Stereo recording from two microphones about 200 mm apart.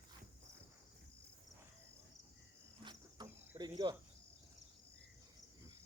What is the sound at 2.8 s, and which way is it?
Cricket, 20° right (ahead or behind).